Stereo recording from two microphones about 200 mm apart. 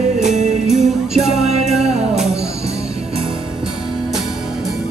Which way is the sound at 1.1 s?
Centre (ahead or behind).